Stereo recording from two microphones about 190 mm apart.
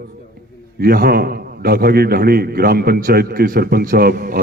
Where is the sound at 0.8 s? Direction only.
50° right (ahead or behind).